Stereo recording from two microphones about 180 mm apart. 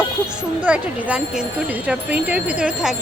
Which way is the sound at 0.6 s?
5° right (ahead or behind).